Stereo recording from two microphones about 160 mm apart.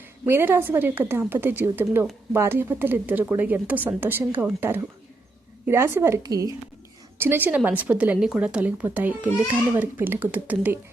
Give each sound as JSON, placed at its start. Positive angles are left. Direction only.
{"t": 0.3, "sound": "a woman's voice", "side_deg": -15}